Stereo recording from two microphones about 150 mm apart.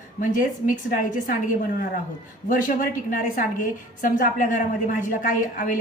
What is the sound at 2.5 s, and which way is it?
A woman's voice, 60° left (ahead or behind).